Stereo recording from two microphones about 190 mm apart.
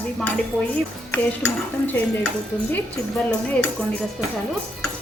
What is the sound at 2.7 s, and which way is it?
Speech, 10° left (ahead or behind).